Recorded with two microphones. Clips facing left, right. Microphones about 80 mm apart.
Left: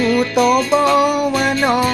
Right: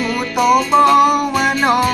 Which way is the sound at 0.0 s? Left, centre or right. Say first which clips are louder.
Left 2 dB; centre.